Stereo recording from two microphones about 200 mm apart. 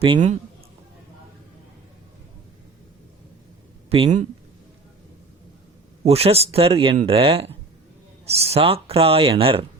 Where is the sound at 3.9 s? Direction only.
25° right (ahead or behind).